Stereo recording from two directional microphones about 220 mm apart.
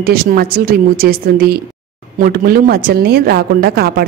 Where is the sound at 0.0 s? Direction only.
45° right (ahead or behind).